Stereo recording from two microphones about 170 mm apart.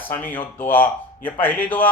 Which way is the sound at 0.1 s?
10° left (ahead or behind).